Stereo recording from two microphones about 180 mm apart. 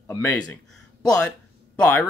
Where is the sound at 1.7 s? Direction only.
5° left (ahead or behind).